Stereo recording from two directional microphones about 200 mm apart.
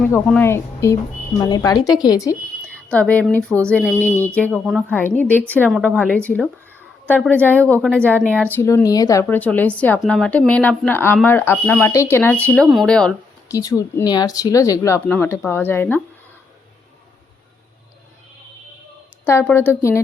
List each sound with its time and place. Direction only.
0.3 s a woman's voice: 10° left (ahead or behind)
13.5 s a woman's voice: 15° left (ahead or behind)
19.2 s a woman's voice: 10° left (ahead or behind)